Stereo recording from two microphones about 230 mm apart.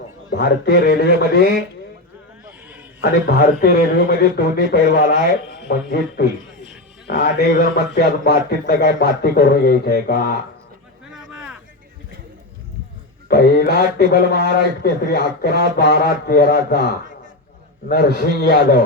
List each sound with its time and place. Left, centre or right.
0.3 s speech: left
3.0 s speech: left
6.2 s speech: left
11.1 s a sound: centre
13.2 s speech: left
17.8 s speech: left